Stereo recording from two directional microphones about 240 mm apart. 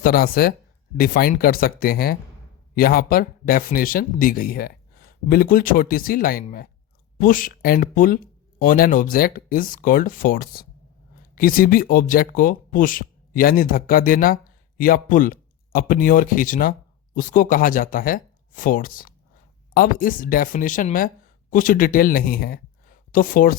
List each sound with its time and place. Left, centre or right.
0.0 s speech: left